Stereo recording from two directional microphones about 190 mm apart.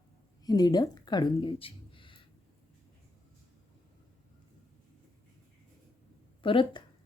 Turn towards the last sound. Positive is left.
turn(degrees=25)  # may be behind; listen again after turning